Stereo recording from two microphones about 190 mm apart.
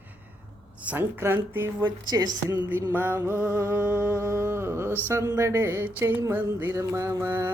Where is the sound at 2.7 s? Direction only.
10° right (ahead or behind).